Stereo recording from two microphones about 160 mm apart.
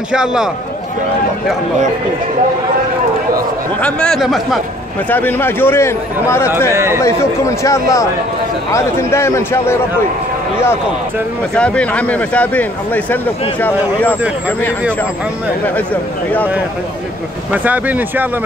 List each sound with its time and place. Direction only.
0.1 s speech: 5° right (ahead or behind)
3.8 s speech: 5° left (ahead or behind)
5.1 s speech: 10° left (ahead or behind)
6.7 s speech: 15° right (ahead or behind)
7.0 s speech: 15° left (ahead or behind)
11.5 s speech: 5° left (ahead or behind)
17.5 s speech: 10° right (ahead or behind)